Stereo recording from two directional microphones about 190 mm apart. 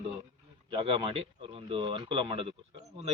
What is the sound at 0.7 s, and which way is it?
A man's voice, 25° right (ahead or behind).